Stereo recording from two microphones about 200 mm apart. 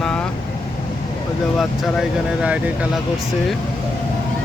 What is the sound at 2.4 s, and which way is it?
Speech, 5° right (ahead or behind).